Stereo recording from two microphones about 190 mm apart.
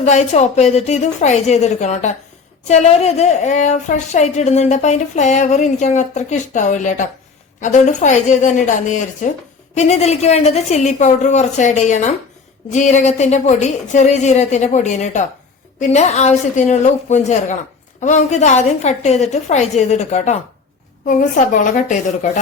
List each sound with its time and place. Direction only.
0.0 s a woman's voice: 35° left (ahead or behind)